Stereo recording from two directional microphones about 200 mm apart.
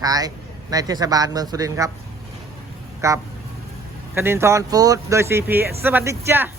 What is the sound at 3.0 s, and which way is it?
Speech, 15° right (ahead or behind).